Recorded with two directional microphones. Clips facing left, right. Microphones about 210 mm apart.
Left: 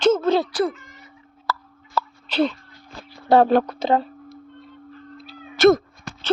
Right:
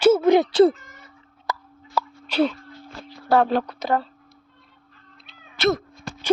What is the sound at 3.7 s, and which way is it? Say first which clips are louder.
Speech: left 3 dB; 20° left (ahead or behind).